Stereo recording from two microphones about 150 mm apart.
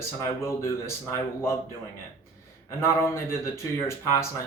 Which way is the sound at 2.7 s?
20° left (ahead or behind).